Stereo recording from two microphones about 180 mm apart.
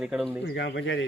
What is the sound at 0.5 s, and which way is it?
Speech, 80° left.